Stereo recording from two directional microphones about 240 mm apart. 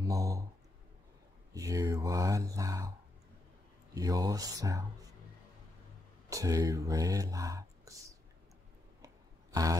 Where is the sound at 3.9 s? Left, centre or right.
Centre.